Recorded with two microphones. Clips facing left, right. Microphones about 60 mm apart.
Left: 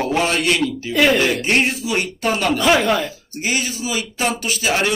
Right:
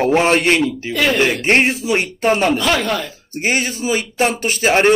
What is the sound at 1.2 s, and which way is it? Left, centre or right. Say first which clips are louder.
Speech: right 3 dB; right.